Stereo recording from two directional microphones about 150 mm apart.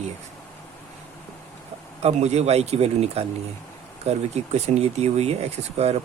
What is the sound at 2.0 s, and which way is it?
Speech, 45° right (ahead or behind).